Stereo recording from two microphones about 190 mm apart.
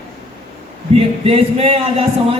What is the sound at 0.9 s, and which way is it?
A man's voice, 30° right (ahead or behind).